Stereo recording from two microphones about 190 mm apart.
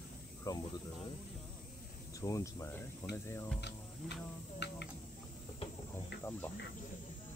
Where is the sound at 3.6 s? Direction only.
60° left (ahead or behind).